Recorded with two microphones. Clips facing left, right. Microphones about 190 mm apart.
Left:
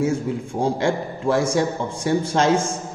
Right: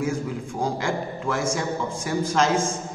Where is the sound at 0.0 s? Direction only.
30° left (ahead or behind).